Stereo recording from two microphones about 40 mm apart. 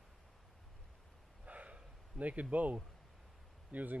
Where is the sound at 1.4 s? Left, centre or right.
Right.